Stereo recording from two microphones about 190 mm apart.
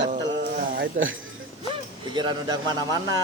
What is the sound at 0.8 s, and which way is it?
Speech, 90° right.